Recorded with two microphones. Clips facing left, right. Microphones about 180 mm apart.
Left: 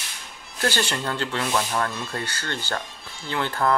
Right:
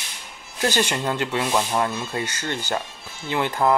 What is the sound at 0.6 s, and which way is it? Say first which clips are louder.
Speech: right 3 dB; 15° right (ahead or behind).